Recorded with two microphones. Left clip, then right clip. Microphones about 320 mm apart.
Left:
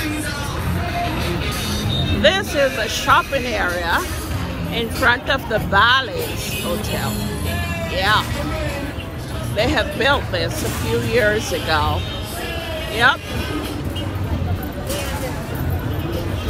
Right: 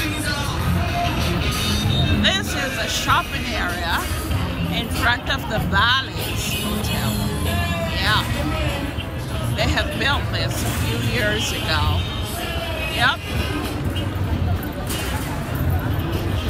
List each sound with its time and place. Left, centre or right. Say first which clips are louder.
0.9 s music: even; centre
2.2 s speech: left 8 dB; centre
7.9 s speech: left 4 dB; centre
9.6 s speech: left 4 dB; centre
12.9 s speech: left 4 dB; centre